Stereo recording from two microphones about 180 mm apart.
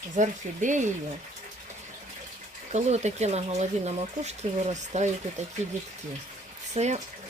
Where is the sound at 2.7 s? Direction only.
40° right (ahead or behind).